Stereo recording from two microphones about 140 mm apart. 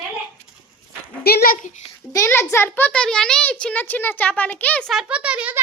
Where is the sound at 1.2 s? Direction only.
90° left; by 1.8 s 65° left (ahead or behind).